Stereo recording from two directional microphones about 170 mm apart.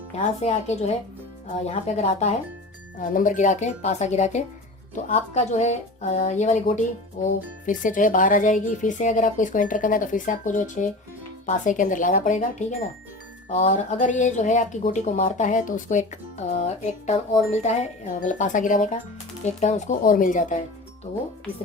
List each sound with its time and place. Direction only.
0.4 s speech: 40° left (ahead or behind)
1.6 s speech: 40° left (ahead or behind)
3.0 s a woman's voice: 50° left (ahead or behind)